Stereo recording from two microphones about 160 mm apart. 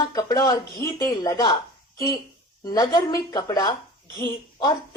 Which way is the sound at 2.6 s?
25° left (ahead or behind).